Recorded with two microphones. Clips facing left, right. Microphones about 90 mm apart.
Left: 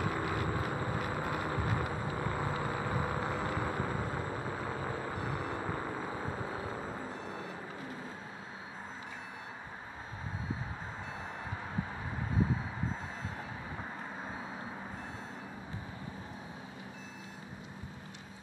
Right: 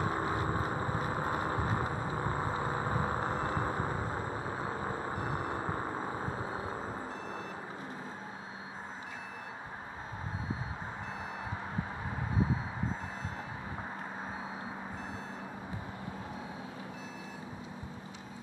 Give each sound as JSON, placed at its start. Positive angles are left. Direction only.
{"t": 0.0, "sound": "vehicle", "side_deg": -30}